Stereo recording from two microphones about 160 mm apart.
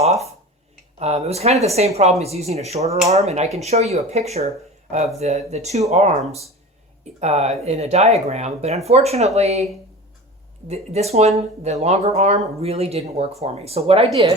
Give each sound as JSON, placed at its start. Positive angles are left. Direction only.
{"t": 0.0, "sound": "a sound", "side_deg": -45}
{"t": 0.9, "sound": "speech", "side_deg": -40}
{"t": 10.7, "sound": "speech", "side_deg": -40}